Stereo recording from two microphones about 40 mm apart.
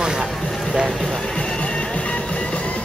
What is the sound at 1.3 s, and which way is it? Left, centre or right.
Music, left.